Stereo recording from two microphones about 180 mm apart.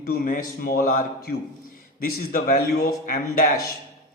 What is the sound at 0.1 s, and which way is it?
Speech, 50° left (ahead or behind).